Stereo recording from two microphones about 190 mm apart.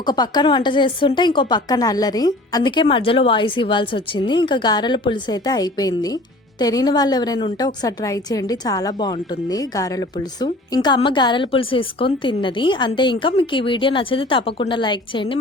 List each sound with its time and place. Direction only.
0.0 s a woman's voice: 20° left (ahead or behind)